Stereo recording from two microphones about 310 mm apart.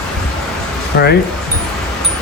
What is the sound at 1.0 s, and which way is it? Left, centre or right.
Speech, left.